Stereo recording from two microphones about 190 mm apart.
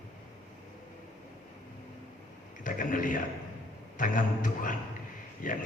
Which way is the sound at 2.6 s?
45° left (ahead or behind).